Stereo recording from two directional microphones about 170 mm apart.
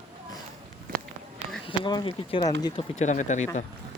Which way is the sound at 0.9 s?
55° right (ahead or behind).